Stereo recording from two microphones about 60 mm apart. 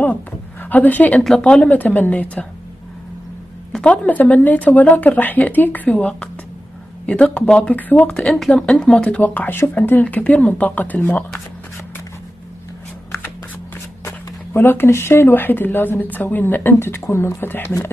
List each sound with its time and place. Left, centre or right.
0.7 s speech: left
3.8 s speech: centre
8.2 s speech: centre
9.2 s speech: left
14.0 s speech: left